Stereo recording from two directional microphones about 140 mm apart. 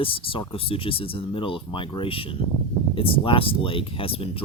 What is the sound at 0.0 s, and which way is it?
Speech, 40° left (ahead or behind).